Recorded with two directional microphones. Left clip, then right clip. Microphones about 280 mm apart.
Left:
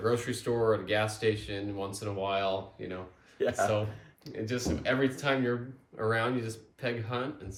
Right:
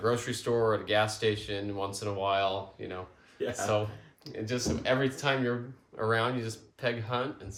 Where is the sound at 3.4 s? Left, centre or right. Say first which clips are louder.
Left 4 dB; centre.